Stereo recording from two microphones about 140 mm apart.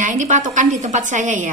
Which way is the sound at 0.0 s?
65° right (ahead or behind).